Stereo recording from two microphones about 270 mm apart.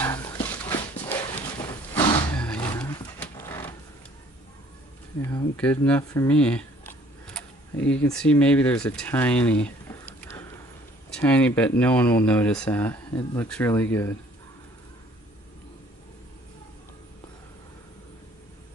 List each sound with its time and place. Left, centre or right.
0.0 s dog: centre
1.2 s a sound: centre
5.2 s speech: centre
13.1 s speech: centre
13.5 s speech: centre